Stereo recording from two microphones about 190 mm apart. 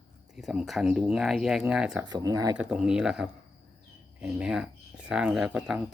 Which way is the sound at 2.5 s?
5° right (ahead or behind).